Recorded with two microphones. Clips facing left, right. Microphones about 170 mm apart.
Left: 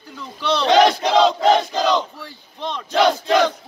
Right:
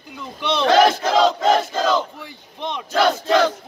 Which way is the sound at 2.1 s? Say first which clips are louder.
Even; 15° right (ahead or behind).